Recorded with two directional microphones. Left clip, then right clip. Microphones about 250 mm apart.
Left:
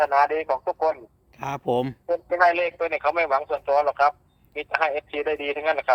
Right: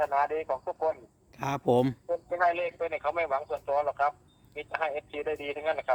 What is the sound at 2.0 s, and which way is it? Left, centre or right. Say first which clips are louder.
A man's voice: left 7 dB; left.